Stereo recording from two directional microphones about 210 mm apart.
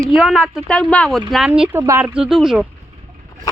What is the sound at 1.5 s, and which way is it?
Speech, 5° right (ahead or behind).